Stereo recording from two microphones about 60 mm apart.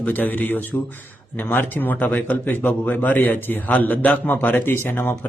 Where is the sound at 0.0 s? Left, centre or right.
Left.